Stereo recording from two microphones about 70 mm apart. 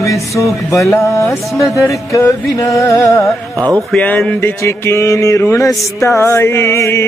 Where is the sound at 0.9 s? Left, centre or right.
Left.